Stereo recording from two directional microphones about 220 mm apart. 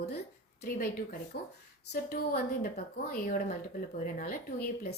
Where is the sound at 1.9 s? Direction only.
45° left (ahead or behind).